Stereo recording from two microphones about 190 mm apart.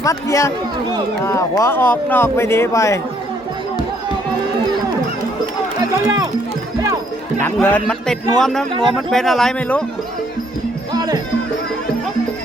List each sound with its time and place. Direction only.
0.0 s speech: 15° left (ahead or behind)
5.8 s speech: 20° right (ahead or behind)
7.4 s speech: 10° left (ahead or behind)
10.9 s music: 20° right (ahead or behind)